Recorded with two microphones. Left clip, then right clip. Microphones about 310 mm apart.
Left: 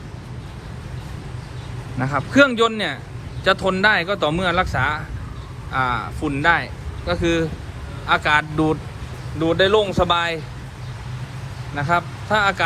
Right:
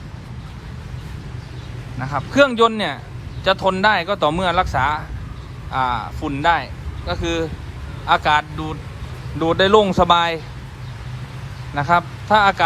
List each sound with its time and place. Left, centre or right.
2.0 s speech: centre
9.4 s speech: right
11.8 s speech: centre